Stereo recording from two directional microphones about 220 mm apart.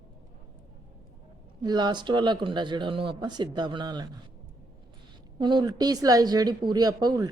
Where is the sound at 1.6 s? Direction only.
20° right (ahead or behind).